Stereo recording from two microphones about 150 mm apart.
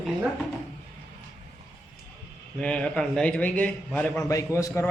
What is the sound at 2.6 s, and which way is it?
Speech, 5° left (ahead or behind).